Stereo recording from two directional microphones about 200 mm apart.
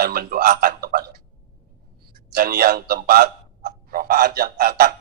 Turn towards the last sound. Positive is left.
turn(degrees=-45)  # may be behind; listen again after turning